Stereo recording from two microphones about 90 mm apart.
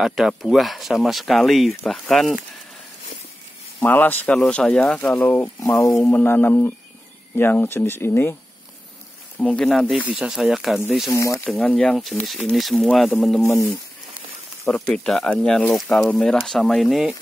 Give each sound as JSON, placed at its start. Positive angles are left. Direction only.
{"t": 0.0, "sound": "speech", "side_deg": -5}
{"t": 3.8, "sound": "speech", "side_deg": 20}
{"t": 9.4, "sound": "speech", "side_deg": 5}
{"t": 9.8, "sound": "speech", "side_deg": -15}
{"t": 11.1, "sound": "speech", "side_deg": 35}
{"t": 11.4, "sound": "speech", "side_deg": 15}
{"t": 13.4, "sound": "speech", "side_deg": 35}
{"t": 14.7, "sound": "speech", "side_deg": 20}
{"t": 15.0, "sound": "speech", "side_deg": 5}